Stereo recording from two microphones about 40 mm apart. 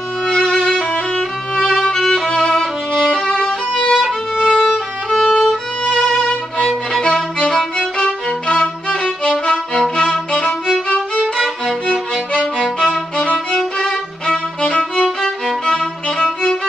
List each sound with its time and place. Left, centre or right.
0.5 s violin: centre
3.3 s music: left
4.0 s violin: centre
5.9 s violin: left
6.6 s violin: centre
7.0 s violin: centre
11.3 s violin: centre
13.6 s violin: centre
15.2 s music: centre